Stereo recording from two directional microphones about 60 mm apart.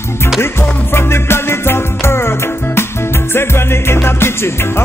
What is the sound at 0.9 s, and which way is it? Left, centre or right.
Music, left.